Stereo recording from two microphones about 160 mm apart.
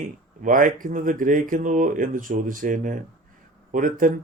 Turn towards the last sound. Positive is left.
turn(degrees=-55)  # may be behind; listen again after turning